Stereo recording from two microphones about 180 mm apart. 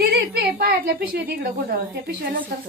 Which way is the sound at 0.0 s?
65° right (ahead or behind).